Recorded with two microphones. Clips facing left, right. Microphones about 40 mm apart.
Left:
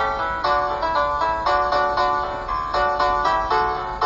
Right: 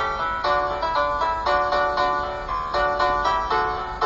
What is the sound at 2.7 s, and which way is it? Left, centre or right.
Music, centre.